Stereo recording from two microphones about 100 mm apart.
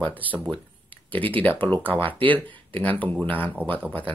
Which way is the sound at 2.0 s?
55° right (ahead or behind).